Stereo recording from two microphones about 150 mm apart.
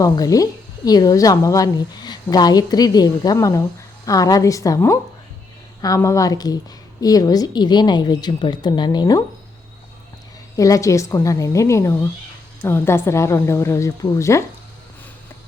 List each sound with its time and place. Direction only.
0.0 s a woman's voice: 25° left (ahead or behind)
10.6 s a woman's voice: 20° left (ahead or behind)